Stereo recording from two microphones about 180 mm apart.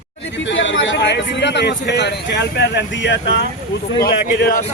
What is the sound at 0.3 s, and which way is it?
A man's voice, 90° left.